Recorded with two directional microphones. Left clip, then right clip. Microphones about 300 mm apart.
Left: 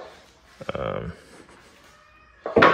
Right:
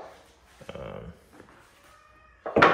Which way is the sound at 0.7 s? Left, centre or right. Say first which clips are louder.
Left 11 dB; left.